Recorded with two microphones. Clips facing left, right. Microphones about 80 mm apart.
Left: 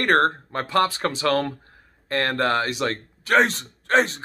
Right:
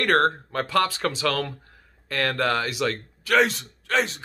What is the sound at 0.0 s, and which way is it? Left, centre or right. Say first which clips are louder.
Speech: left 1 dB; left.